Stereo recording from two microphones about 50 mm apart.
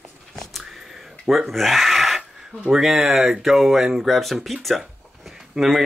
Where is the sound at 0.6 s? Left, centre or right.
Centre.